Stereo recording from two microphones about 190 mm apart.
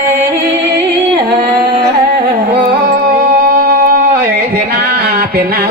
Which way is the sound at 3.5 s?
55° right (ahead or behind).